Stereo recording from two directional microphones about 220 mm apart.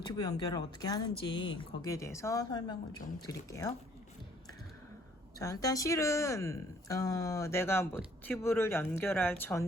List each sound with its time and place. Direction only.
0.0 s speech: 20° left (ahead or behind)
5.4 s speech: 15° left (ahead or behind)